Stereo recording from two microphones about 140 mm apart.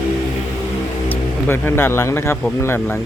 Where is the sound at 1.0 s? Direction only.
15° left (ahead or behind).